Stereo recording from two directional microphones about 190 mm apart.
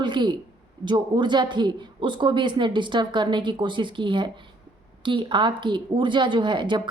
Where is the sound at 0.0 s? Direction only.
25° right (ahead or behind).